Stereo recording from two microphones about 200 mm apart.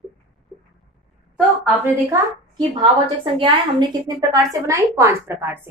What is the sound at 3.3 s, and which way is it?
A woman's voice, 25° right (ahead or behind).